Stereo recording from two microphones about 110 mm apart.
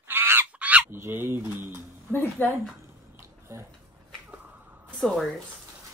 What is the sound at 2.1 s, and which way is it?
Speech, 20° left (ahead or behind).